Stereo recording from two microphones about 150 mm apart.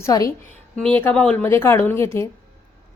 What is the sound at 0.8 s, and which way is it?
A woman's voice, 10° left (ahead or behind).